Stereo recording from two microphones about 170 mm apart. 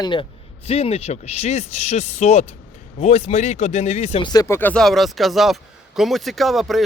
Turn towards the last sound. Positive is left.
turn(degrees=0)  # may be behind; listen again after turning